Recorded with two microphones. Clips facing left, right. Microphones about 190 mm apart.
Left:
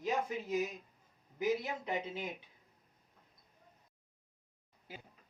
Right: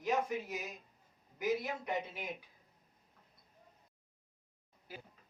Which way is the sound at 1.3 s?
25° left (ahead or behind).